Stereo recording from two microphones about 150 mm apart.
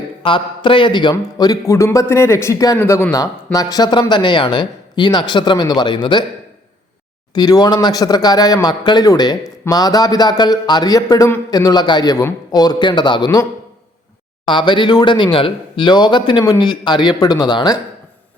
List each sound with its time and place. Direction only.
0.2 s a man's voice: 35° left (ahead or behind)
7.3 s a man's voice: 25° left (ahead or behind)